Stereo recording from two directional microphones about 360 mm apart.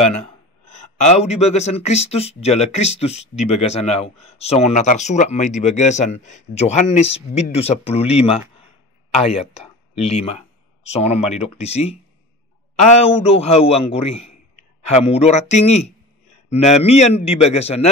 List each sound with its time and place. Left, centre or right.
0.9 s speech: centre
15.2 s speech: centre